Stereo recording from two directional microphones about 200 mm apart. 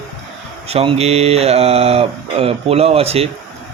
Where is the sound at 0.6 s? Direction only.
30° right (ahead or behind).